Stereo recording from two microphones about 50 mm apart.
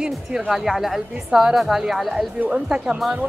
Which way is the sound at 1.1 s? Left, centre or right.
Centre.